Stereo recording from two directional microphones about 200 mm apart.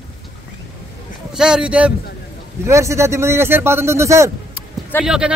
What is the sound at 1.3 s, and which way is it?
A man's voice, 5° right (ahead or behind).